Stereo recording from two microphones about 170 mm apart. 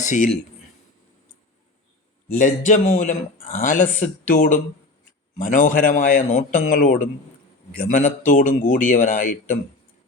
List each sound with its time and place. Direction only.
0.0 s speech: 45° left (ahead or behind)
2.3 s speech: 50° left (ahead or behind)